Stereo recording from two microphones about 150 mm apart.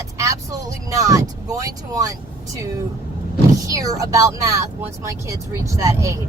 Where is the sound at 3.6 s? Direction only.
25° right (ahead or behind).